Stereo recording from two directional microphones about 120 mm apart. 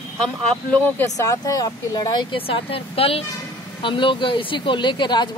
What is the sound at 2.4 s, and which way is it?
Speech, 55° left (ahead or behind).